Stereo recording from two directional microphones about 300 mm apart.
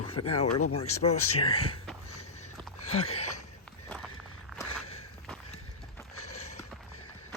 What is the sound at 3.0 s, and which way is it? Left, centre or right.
Speech, left.